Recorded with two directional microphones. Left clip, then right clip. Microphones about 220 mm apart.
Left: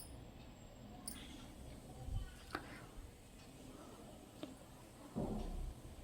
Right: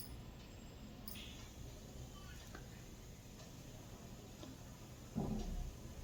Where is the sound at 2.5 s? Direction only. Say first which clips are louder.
Left 13 dB; 40° left (ahead or behind).